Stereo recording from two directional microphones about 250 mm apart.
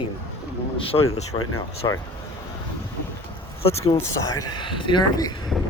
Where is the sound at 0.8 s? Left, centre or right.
Left.